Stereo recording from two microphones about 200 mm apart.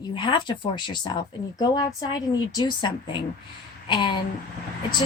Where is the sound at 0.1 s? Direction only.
25° left (ahead or behind).